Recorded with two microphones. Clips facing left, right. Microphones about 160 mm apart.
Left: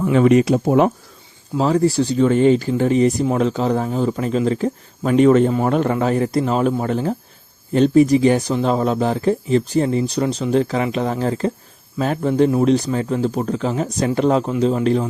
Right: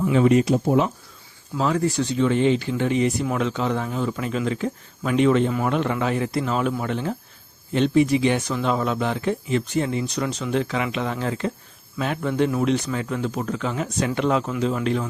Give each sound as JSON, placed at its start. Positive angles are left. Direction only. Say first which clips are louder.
{"t": 0.0, "sound": "speech", "louder": "left 4 dB", "side_deg": 60}
{"t": 1.5, "sound": "speech", "louder": "left 6 dB", "side_deg": 35}